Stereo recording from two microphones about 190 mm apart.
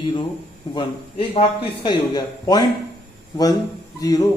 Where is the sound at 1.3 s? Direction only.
30° left (ahead or behind).